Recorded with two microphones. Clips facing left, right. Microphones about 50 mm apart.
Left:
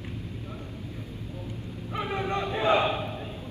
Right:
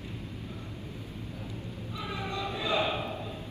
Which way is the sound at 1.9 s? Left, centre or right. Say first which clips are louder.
Left 7 dB; left.